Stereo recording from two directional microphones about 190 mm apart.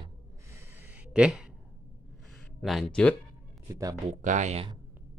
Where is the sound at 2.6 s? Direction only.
Centre (ahead or behind).